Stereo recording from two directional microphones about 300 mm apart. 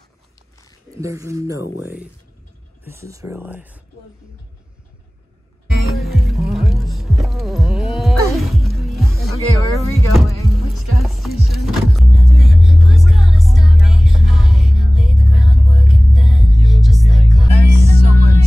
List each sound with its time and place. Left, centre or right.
1.0 s speech: centre
5.9 s music: centre